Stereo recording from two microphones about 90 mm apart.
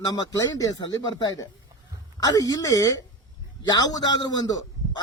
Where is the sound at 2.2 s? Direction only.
45° left (ahead or behind).